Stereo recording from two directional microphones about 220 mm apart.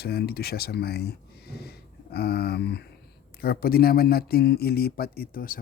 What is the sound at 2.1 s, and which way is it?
Speech, 45° left (ahead or behind).